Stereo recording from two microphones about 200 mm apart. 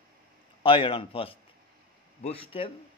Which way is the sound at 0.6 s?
25° left (ahead or behind).